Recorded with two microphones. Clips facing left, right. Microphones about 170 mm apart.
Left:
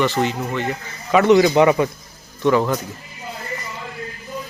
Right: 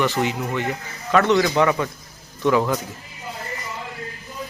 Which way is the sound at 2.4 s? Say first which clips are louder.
Left 2 dB; centre (ahead or behind).